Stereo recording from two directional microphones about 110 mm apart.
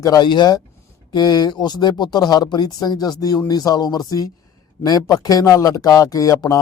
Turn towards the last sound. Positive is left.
turn(degrees=30)  # may be behind; listen again after turning